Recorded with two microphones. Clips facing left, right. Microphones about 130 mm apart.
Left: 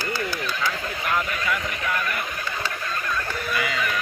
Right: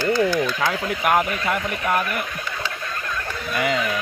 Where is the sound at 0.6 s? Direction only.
60° right (ahead or behind).